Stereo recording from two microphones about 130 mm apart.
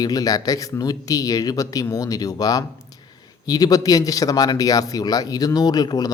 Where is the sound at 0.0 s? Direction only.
30° left (ahead or behind).